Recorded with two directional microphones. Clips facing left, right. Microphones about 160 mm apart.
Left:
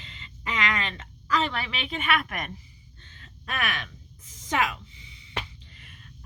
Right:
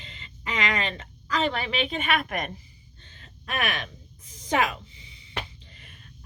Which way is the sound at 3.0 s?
30° right (ahead or behind).